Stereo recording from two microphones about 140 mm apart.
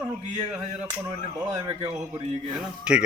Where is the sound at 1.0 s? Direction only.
20° right (ahead or behind).